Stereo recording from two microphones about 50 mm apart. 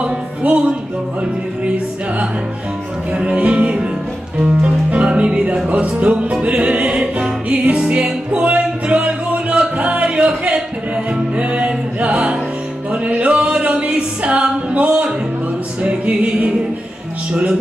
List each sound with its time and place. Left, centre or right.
0.0 s music: right
3.1 s music: right
17.3 s speech: centre